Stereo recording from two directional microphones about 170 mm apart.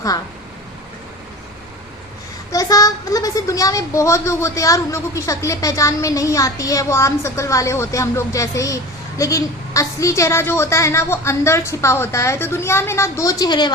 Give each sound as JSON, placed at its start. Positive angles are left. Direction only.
{"t": 2.5, "sound": "speech", "side_deg": 20}